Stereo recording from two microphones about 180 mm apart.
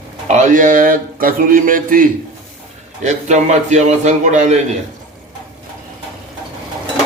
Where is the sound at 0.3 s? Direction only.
45° right (ahead or behind).